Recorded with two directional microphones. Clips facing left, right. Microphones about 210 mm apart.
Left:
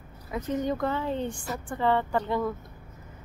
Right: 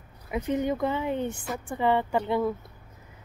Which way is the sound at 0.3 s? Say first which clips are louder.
Right 2 dB; 15° right (ahead or behind).